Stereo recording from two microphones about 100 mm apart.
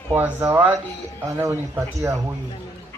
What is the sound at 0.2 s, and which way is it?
Speech, 20° right (ahead or behind).